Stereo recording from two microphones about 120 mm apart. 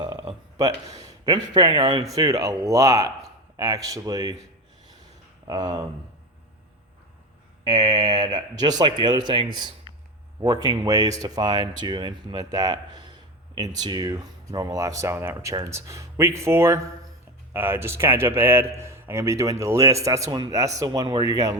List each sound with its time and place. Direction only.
0.0 s a sound: 40° right (ahead or behind)
1.5 s speech: 35° right (ahead or behind)
5.5 s speech: 35° right (ahead or behind)
7.6 s speech: 35° right (ahead or behind)